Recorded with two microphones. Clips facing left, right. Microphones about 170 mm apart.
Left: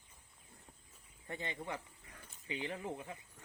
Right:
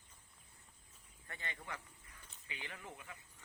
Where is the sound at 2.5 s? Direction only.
30° left (ahead or behind).